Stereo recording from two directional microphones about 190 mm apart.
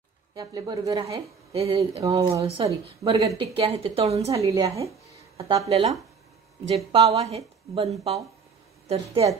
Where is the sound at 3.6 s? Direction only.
30° right (ahead or behind).